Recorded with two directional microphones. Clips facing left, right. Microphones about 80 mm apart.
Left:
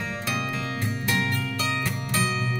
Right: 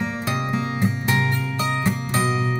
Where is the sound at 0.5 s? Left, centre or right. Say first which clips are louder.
Right 6 dB; right.